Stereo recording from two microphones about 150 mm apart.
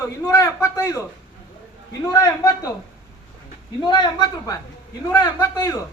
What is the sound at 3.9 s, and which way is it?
Speech, 30° left (ahead or behind).